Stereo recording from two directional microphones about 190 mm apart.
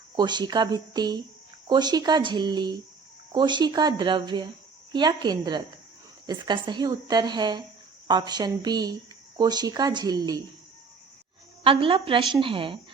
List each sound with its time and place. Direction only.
0.2 s speech: 20° right (ahead or behind)
11.6 s speech: 30° right (ahead or behind)